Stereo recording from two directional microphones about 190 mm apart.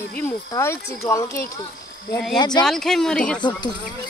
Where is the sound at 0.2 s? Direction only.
15° left (ahead or behind).